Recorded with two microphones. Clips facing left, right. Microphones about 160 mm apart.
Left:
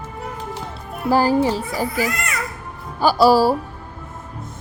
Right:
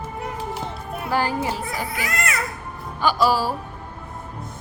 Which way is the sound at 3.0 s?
35° left (ahead or behind).